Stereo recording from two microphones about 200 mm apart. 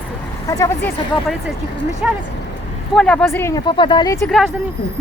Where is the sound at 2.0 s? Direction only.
5° right (ahead or behind).